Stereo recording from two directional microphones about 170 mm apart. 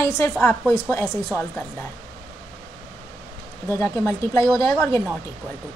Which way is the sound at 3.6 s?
15° left (ahead or behind).